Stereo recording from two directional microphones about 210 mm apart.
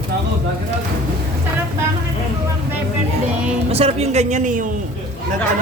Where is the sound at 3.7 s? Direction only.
30° right (ahead or behind).